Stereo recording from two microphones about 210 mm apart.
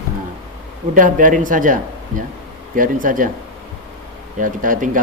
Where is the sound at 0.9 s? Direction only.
40° right (ahead or behind).